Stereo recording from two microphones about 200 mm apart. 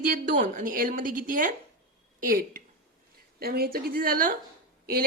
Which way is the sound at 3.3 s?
50° right (ahead or behind).